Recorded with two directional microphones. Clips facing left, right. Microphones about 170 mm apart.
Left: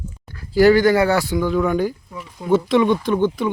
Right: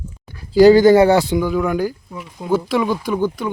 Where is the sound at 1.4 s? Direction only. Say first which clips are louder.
Even; 5° right (ahead or behind).